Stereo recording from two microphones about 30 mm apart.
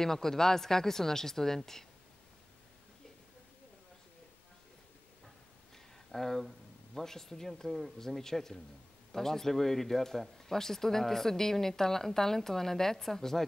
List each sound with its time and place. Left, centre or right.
0.0 s speech: centre
6.1 s speech: centre
8.2 s speech: centre